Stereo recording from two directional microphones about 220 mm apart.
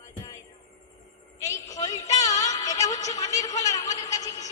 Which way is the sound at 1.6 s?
15° left (ahead or behind).